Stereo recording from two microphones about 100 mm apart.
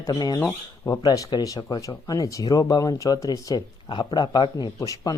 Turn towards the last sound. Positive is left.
turn(degrees=35)  # may be behind; listen again after turning